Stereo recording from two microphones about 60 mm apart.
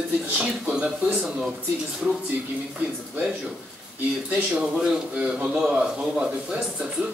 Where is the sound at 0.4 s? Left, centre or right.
Right.